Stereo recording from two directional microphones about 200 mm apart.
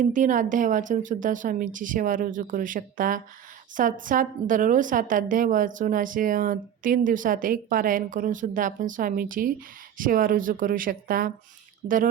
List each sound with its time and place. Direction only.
0.0 s a woman's voice: 40° right (ahead or behind)